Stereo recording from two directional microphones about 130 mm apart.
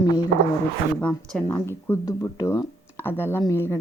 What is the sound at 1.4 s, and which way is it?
Speech, 20° left (ahead or behind).